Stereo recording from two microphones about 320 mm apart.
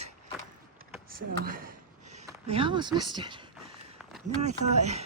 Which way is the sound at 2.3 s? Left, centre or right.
Centre.